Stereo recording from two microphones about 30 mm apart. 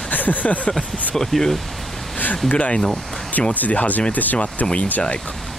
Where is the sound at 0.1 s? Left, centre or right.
Left.